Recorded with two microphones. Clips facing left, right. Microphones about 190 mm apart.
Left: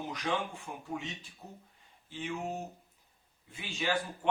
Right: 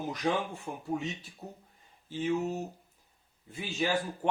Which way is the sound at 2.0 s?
40° right (ahead or behind).